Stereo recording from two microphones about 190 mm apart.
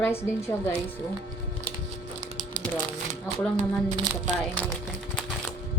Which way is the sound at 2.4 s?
40° right (ahead or behind).